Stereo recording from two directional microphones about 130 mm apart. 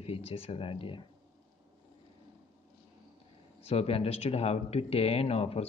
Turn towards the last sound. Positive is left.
turn(degrees=50)  # may be behind; listen again after turning